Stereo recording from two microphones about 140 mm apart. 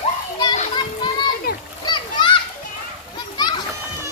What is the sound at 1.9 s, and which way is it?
Splash, 35° left (ahead or behind).